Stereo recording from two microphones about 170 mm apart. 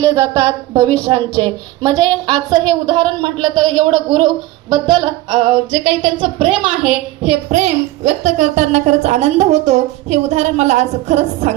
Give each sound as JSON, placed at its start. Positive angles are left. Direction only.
{"t": 0.0, "sound": "a woman's voice", "side_deg": -20}
{"t": 3.5, "sound": "speech", "side_deg": 0}
{"t": 3.8, "sound": "a woman's voice", "side_deg": -30}
{"t": 7.3, "sound": "a woman's voice", "side_deg": -40}